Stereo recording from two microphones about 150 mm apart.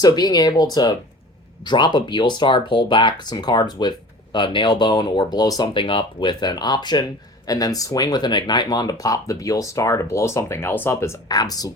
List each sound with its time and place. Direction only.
0.0 s speech: 25° left (ahead or behind)